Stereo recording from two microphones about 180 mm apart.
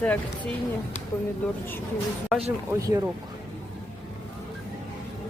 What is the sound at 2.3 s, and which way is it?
Speech, centre (ahead or behind).